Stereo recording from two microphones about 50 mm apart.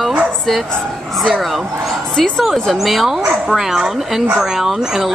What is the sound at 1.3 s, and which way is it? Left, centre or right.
A woman's voice, centre.